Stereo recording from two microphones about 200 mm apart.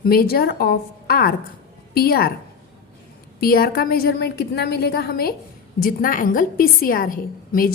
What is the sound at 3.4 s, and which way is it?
A woman's voice, 50° left (ahead or behind).